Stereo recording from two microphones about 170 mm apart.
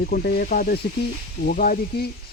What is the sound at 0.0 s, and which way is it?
Speech, 70° left (ahead or behind).